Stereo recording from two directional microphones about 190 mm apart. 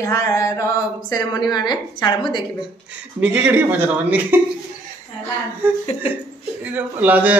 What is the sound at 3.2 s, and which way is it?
Speech, 5° right (ahead or behind).